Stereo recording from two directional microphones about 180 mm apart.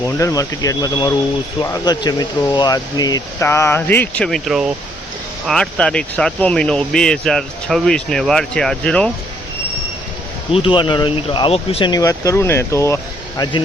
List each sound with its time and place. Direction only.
0.2 s speech: 20° left (ahead or behind)
10.5 s speech: 30° left (ahead or behind)
11.9 s speech: 20° left (ahead or behind)